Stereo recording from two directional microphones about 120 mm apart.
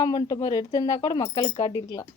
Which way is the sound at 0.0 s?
35° left (ahead or behind).